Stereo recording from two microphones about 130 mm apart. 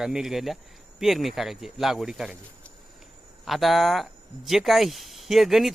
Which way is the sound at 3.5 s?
Centre (ahead or behind).